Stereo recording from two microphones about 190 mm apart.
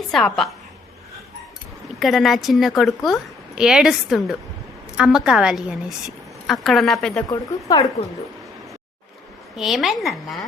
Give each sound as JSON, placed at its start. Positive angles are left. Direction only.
{"t": 0.1, "sound": "a woman's voice", "side_deg": 0}
{"t": 2.0, "sound": "a woman's voice", "side_deg": 0}
{"t": 7.3, "sound": "speech", "side_deg": 20}
{"t": 9.6, "sound": "a woman's voice", "side_deg": 0}